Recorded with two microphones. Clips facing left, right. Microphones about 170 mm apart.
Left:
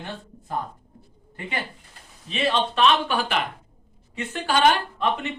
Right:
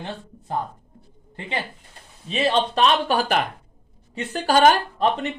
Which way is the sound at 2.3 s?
35° right (ahead or behind).